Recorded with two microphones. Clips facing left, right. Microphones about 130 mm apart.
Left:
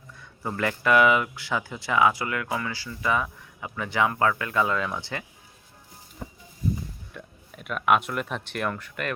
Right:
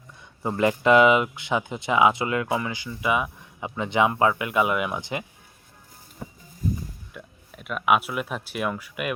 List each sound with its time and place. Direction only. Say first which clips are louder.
0.2 s speech: right 5 dB; 20° right (ahead or behind)
6.2 s a sound: right 1 dB; 5° right (ahead or behind)
7.1 s speech: even; 5° right (ahead or behind)